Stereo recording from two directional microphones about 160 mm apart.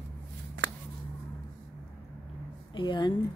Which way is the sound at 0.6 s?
90° right.